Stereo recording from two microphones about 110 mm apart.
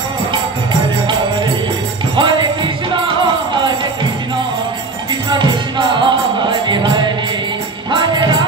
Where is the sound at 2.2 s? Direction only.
45° right (ahead or behind).